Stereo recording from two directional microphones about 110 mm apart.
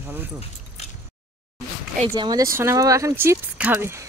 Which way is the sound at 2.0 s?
45° right (ahead or behind).